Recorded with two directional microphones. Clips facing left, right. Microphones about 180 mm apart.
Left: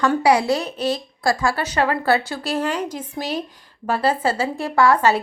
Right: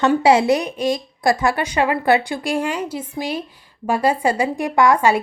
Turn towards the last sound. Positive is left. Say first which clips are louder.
# right 1 dB
turn(degrees=-10)  # may be behind; listen again after turning